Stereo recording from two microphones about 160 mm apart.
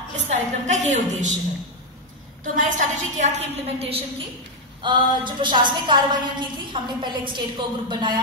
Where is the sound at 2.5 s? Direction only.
55° right (ahead or behind).